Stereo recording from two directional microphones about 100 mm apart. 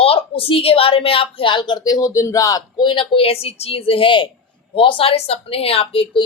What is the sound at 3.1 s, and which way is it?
A woman's voice, 75° left (ahead or behind).